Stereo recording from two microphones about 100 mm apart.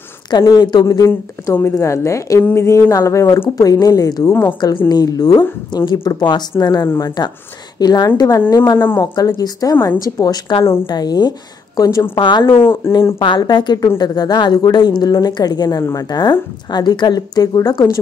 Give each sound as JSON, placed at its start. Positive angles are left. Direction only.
{"t": 0.3, "sound": "a woman's voice", "side_deg": 40}
{"t": 0.8, "sound": "a woman's voice", "side_deg": 35}
{"t": 4.3, "sound": "speech", "side_deg": 20}
{"t": 4.8, "sound": "a woman's voice", "side_deg": 40}
{"t": 6.8, "sound": "speech", "side_deg": 25}
{"t": 7.8, "sound": "a woman's voice", "side_deg": 40}
{"t": 8.4, "sound": "speech", "side_deg": 25}
{"t": 9.0, "sound": "a woman's voice", "side_deg": 40}
{"t": 10.6, "sound": "speech", "side_deg": 25}
{"t": 10.9, "sound": "a woman's voice", "side_deg": 40}
{"t": 12.2, "sound": "a woman's voice", "side_deg": 50}